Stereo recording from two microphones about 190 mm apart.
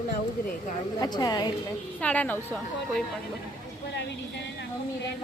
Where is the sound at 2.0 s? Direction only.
5° left (ahead or behind).